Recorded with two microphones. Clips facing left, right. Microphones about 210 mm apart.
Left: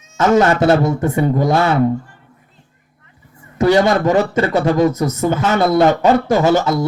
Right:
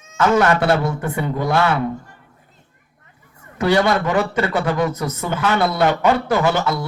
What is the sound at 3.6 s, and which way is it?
A man's voice, 40° left (ahead or behind).